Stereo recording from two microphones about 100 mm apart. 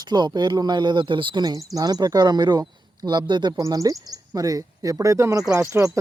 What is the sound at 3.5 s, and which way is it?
Speech, 30° right (ahead or behind).